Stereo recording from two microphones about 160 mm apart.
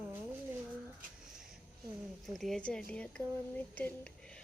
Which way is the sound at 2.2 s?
Centre (ahead or behind).